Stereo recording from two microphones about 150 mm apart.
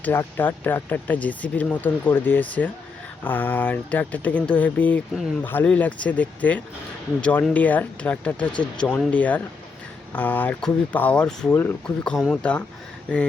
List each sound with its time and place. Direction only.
0.0 s speech: 15° left (ahead or behind)